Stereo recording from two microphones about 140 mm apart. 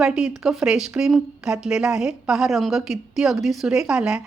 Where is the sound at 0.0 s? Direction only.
5° right (ahead or behind).